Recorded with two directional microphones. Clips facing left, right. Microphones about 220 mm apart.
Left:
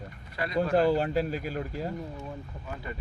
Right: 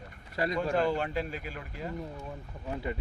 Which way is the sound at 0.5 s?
35° left (ahead or behind).